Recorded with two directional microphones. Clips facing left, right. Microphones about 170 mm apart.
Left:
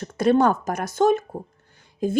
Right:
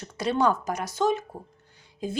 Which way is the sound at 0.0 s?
50° left (ahead or behind).